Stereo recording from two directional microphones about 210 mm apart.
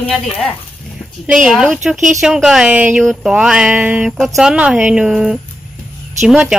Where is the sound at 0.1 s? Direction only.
5° left (ahead or behind).